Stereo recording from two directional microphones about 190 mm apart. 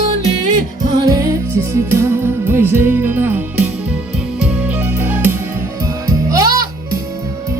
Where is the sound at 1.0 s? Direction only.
20° right (ahead or behind).